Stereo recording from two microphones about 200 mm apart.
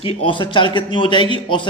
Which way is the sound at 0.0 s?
30° left (ahead or behind).